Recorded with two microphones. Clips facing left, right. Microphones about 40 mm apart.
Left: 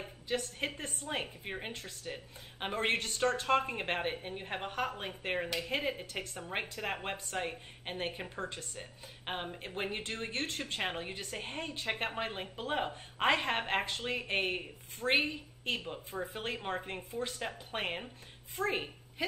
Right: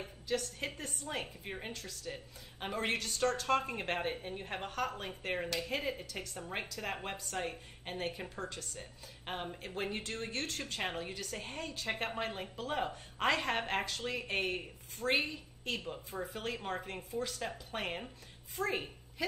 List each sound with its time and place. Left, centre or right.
0.3 s a woman's voice: left